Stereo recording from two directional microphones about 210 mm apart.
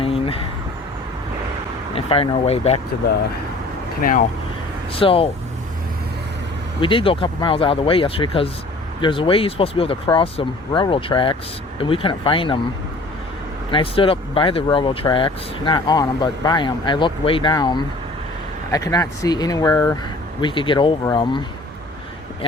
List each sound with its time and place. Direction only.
0.0 s vehicle: 25° left (ahead or behind)
2.0 s speech: 25° left (ahead or behind)
4.0 s speech: 40° left (ahead or behind)
4.9 s speech: 25° left (ahead or behind)
6.8 s speech: 25° left (ahead or behind)
13.7 s speech: 25° left (ahead or behind)